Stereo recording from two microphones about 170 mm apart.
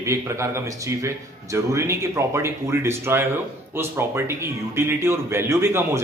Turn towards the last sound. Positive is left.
turn(degrees=-15)  # may be behind; listen again after turning